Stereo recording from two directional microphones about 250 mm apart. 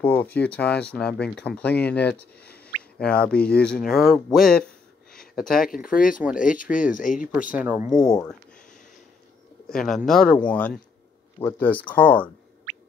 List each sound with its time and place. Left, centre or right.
0.0 s speech: centre
5.1 s a sound: centre
5.5 s speech: left
7.5 s speech: centre
9.7 s speech: centre